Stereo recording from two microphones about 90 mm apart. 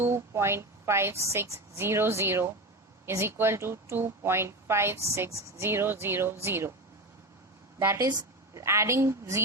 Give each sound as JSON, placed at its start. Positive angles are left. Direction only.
{"t": 0.0, "sound": "a woman's voice", "side_deg": -30}
{"t": 8.5, "sound": "a woman's voice", "side_deg": -30}